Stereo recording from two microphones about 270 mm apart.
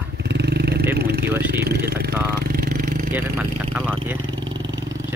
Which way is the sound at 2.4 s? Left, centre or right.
Right.